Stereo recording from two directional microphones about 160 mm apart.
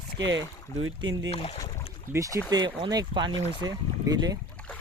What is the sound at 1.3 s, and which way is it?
Speech, 35° left (ahead or behind).